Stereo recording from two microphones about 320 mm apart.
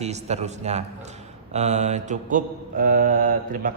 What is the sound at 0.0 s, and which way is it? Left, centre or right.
Mantra, right.